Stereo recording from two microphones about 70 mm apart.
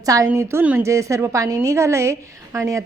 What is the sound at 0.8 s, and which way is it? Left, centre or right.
A woman's voice, right.